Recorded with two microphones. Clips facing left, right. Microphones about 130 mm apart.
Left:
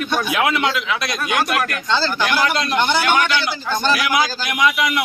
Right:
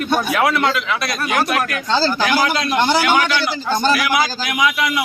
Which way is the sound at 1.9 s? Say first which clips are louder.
Right 3 dB; 35° right (ahead or behind).